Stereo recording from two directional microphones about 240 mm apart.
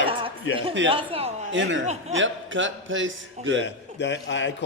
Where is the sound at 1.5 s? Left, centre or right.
Right.